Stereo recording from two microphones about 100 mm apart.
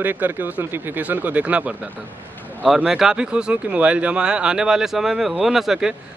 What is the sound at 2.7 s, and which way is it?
Speech, 5° right (ahead or behind).